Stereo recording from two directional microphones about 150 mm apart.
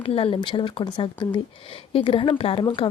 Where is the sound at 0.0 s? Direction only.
40° left (ahead or behind).